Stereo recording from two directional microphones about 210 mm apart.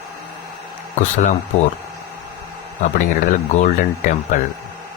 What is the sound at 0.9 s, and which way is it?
Speech, 35° left (ahead or behind).